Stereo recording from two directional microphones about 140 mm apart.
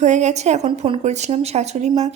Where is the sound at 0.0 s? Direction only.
55° right (ahead or behind).